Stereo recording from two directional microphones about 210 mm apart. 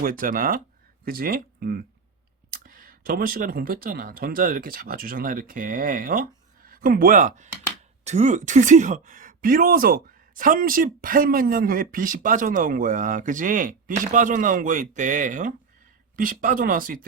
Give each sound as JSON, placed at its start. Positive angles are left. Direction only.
{"t": 0.0, "sound": "speech", "side_deg": -40}